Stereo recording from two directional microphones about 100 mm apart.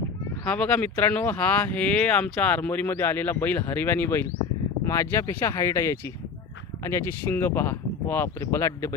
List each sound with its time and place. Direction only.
0.4 s speech: 10° left (ahead or behind); by 9.0 s 30° left (ahead or behind)